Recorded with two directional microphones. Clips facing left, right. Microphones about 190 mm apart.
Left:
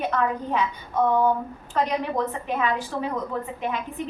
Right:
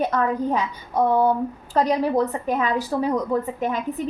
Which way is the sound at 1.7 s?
35° right (ahead or behind).